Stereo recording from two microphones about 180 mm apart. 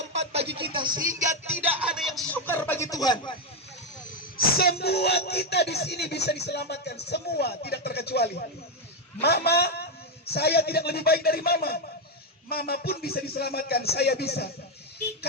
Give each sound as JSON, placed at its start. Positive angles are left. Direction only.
{"t": 0.3, "sound": "a sound", "side_deg": -30}
{"t": 1.2, "sound": "music", "side_deg": -15}
{"t": 1.8, "sound": "chuckle", "side_deg": -5}
{"t": 4.1, "sound": "a man's voice", "side_deg": 55}